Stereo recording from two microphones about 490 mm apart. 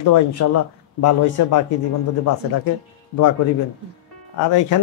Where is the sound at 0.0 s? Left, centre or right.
Left.